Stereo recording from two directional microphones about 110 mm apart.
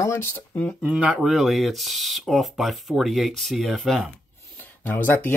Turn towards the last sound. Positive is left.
turn(degrees=20)  # may be behind; listen again after turning